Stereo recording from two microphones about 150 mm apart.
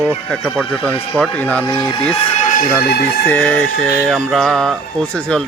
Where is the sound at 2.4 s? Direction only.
60° left (ahead or behind).